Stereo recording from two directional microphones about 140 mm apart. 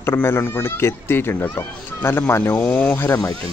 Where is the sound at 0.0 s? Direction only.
15° left (ahead or behind).